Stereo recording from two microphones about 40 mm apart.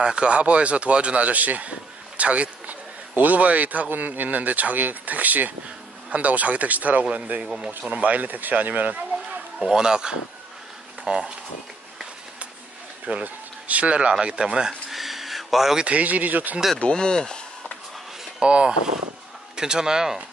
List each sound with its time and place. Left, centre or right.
0.0 s speech: right
9.6 s speech: centre
13.0 s speech: right
14.9 s a sound: centre
15.8 s speech: right
16.9 s speech: centre
18.4 s speech: right